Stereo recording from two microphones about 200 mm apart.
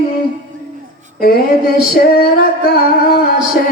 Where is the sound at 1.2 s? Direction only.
50° left (ahead or behind).